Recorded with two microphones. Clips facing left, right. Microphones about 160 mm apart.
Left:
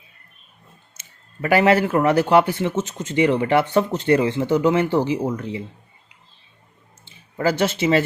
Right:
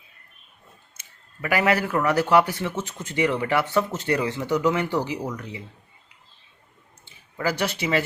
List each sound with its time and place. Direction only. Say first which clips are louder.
0.9 s speech: left 10 dB; 30° left (ahead or behind)
7.0 s speech: left 5 dB; 30° left (ahead or behind)